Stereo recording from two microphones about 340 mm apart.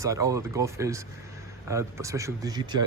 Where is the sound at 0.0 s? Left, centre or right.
Centre.